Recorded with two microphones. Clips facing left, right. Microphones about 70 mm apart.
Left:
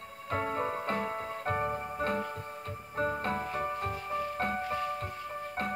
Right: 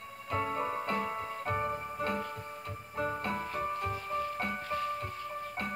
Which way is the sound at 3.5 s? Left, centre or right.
Left.